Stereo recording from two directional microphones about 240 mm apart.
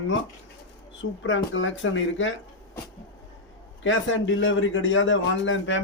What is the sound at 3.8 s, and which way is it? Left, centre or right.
Speech, left.